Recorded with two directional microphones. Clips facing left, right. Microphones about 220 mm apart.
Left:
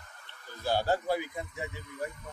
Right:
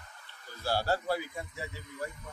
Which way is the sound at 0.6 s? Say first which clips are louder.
Left 2 dB; 20° left (ahead or behind).